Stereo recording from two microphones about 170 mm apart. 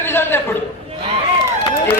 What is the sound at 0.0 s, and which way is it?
Chatter, 15° left (ahead or behind).